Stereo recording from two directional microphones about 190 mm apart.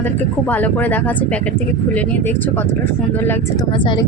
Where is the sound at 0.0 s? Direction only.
10° left (ahead or behind).